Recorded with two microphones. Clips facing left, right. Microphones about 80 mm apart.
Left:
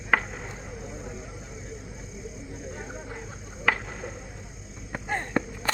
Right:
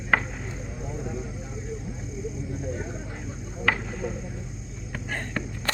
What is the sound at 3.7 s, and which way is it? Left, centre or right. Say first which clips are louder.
Cricket: even; centre.